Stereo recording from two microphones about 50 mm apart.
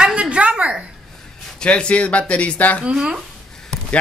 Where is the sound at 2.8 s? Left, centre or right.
Centre.